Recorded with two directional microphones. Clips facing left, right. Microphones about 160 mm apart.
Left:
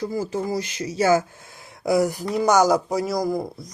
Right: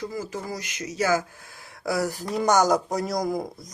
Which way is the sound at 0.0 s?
30° left (ahead or behind).